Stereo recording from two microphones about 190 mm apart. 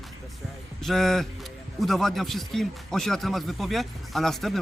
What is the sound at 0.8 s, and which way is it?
Speech, centre (ahead or behind).